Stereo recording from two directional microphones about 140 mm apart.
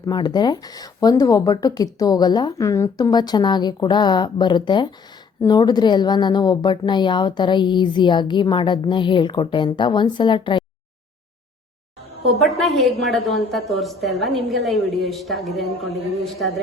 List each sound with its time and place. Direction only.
0.0 s a woman's voice: 30° left (ahead or behind)
12.3 s a woman's voice: centre (ahead or behind)